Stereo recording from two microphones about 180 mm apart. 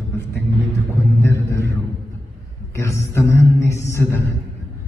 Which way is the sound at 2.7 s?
15° left (ahead or behind).